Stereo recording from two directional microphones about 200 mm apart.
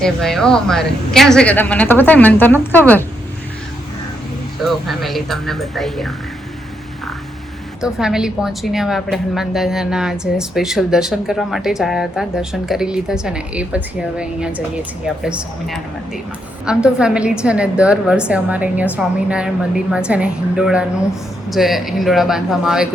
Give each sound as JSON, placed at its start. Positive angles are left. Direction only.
{"t": 0.0, "sound": "a woman's voice", "side_deg": 0}
{"t": 4.6, "sound": "a woman's voice", "side_deg": 0}
{"t": 7.8, "sound": "a woman's voice", "side_deg": -5}